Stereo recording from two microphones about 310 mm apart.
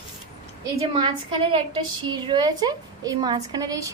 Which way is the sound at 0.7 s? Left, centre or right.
Centre.